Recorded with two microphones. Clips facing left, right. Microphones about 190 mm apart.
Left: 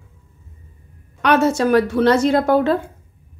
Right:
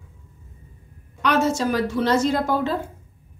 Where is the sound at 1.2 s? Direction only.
60° left (ahead or behind).